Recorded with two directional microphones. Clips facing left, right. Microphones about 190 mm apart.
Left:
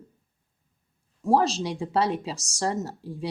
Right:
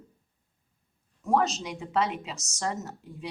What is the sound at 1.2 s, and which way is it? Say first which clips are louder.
Speech: left 3 dB; 30° left (ahead or behind).